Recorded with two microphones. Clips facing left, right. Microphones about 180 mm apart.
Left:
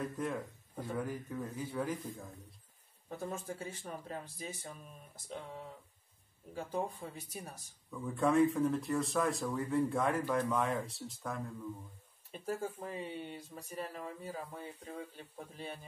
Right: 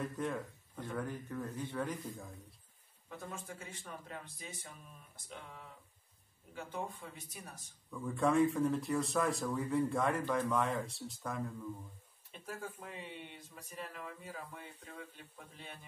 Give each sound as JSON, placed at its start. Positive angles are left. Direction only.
{"t": 0.0, "sound": "speech", "side_deg": 0}
{"t": 3.1, "sound": "speech", "side_deg": 35}
{"t": 7.9, "sound": "speech", "side_deg": 0}
{"t": 12.3, "sound": "speech", "side_deg": 30}